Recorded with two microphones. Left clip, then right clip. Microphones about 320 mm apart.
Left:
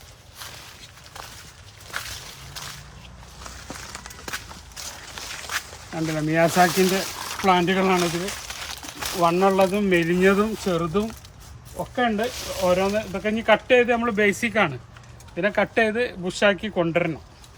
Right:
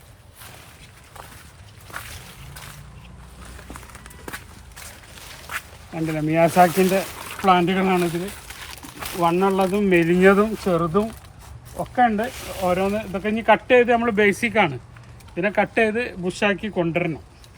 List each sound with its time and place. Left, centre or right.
5.5 s speech: centre
8.3 s pour: centre
9.1 s speech: centre